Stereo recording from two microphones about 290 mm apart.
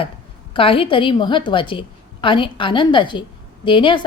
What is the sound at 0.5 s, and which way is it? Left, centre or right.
A woman's voice, centre.